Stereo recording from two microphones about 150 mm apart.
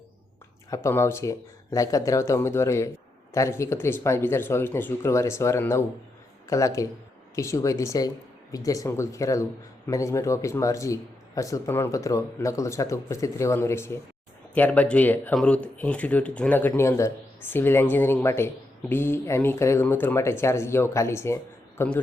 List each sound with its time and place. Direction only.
0.7 s a man's voice: 20° left (ahead or behind)